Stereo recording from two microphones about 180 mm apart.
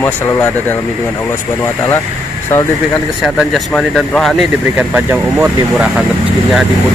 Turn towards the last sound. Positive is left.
turn(degrees=-5)  # may be behind; listen again after turning